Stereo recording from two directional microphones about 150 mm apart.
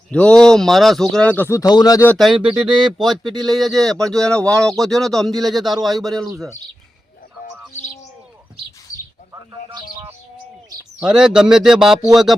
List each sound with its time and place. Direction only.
0.1 s speech: 5° left (ahead or behind); by 2.0 s 25° left (ahead or behind)
2.0 s speech: centre (ahead or behind)
8.9 s bird: 20° left (ahead or behind)
11.0 s speech: 5° right (ahead or behind)